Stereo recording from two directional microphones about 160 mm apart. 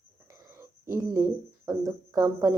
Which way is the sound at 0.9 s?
15° right (ahead or behind).